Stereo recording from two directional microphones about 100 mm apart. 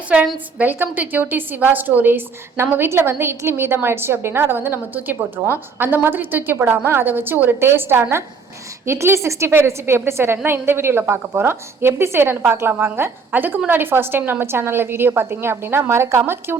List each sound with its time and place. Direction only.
0.6 s a woman's voice: 20° right (ahead or behind)